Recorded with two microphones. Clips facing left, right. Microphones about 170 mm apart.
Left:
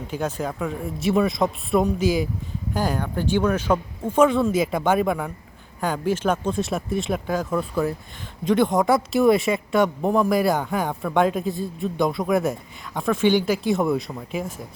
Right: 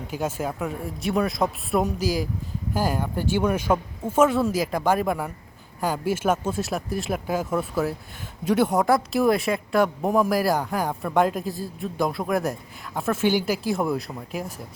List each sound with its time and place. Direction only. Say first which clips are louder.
0.2 s speech: left 1 dB; 5° right (ahead or behind)